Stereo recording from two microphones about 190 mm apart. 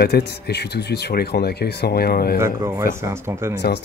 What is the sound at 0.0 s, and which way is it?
Speech, 60° left (ahead or behind).